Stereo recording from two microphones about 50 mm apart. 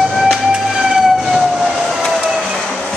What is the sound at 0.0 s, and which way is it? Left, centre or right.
Train, centre.